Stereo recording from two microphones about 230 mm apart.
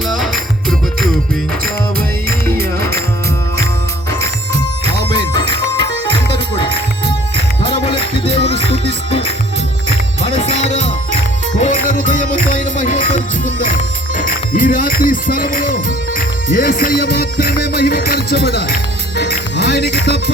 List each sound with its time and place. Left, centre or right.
5.1 s music: centre
10.2 s music: left